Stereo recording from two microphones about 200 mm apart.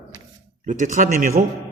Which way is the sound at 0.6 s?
40° right (ahead or behind).